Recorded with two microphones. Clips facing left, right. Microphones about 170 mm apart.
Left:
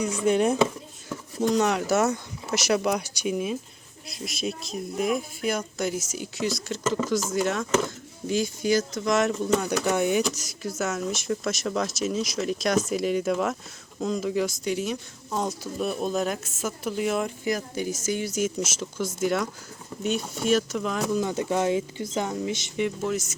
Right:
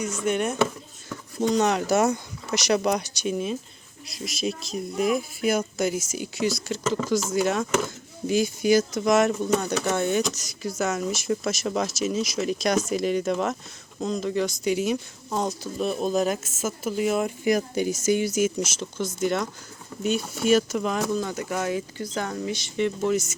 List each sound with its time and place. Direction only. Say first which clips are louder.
0.3 s chopping: left 4 dB; 30° left (ahead or behind)
1.1 s speech: even; 5° left (ahead or behind)
4.1 s speech: right 2 dB; centre (ahead or behind)
9.6 s speech: left 1 dB; 10° left (ahead or behind)
17.4 s a woman's voice: right 5 dB; 15° right (ahead or behind)
18.3 s speech: right 3 dB; centre (ahead or behind)
21.2 s speech: left 3 dB; 25° left (ahead or behind)
23.0 s speech: right 4 dB; centre (ahead or behind)